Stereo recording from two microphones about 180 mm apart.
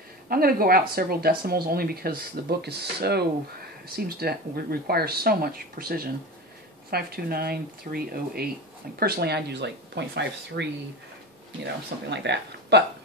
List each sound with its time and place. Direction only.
0.3 s speech: 55° right (ahead or behind); by 12.8 s 70° right (ahead or behind)